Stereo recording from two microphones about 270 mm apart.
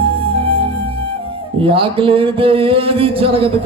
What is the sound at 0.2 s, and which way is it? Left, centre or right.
Music, centre.